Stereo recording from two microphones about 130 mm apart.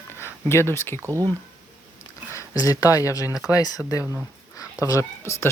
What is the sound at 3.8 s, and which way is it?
Speech, 15° right (ahead or behind).